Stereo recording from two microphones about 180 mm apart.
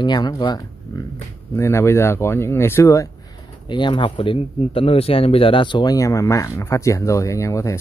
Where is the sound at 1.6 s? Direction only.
15° left (ahead or behind).